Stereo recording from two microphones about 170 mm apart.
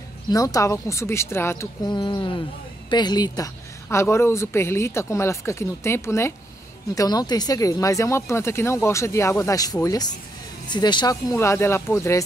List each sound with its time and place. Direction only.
0.3 s speech: 20° left (ahead or behind)